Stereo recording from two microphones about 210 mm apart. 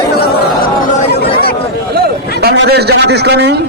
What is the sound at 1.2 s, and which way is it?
Chatter, 45° left (ahead or behind).